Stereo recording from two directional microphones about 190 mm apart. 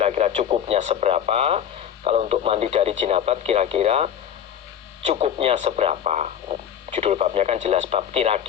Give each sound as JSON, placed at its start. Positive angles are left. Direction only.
{"t": 0.0, "sound": "speech", "side_deg": -35}